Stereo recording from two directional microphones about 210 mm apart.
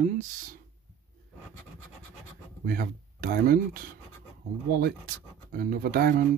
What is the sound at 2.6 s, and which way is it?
Speech, 45° right (ahead or behind).